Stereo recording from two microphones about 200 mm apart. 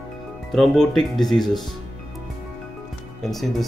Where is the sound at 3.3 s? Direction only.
Centre (ahead or behind).